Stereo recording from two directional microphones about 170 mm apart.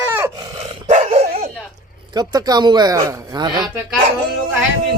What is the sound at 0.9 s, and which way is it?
Dog, 40° right (ahead or behind).